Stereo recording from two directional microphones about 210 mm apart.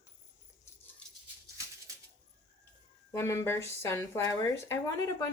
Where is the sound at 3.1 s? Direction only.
15° left (ahead or behind).